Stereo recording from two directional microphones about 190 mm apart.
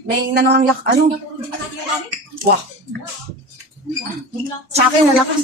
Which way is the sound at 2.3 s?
55° right (ahead or behind).